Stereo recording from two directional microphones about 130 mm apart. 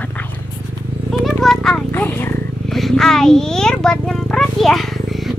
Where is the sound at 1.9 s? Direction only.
15° left (ahead or behind).